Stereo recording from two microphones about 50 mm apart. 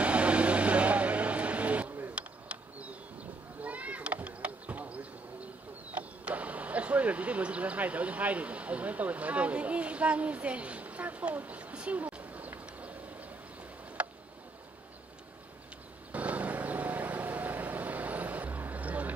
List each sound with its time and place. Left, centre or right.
0.0 s vehicle: right
2.1 s a sound: right
3.6 s meow: right
5.9 s speech: right
14.0 s a sound: right
16.1 s vehicle: right